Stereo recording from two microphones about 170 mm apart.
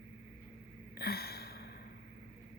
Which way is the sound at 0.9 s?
65° left (ahead or behind).